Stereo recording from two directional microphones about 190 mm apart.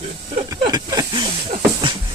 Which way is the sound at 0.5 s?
20° right (ahead or behind).